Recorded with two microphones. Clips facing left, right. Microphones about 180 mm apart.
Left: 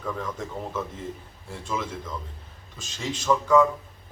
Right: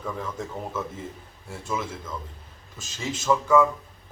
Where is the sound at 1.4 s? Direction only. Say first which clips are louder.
Even; 5° right (ahead or behind).